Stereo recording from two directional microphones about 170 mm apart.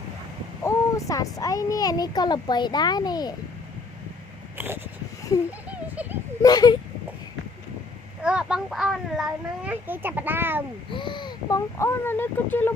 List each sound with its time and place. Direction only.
0.6 s a child's voice: 20° left (ahead or behind)
4.5 s a sound: 10° right (ahead or behind)
6.4 s a child's voice: 20° left (ahead or behind)
8.2 s a child's voice: 5° right (ahead or behind)
10.9 s speech: 30° left (ahead or behind); by 12.7 s 10° left (ahead or behind)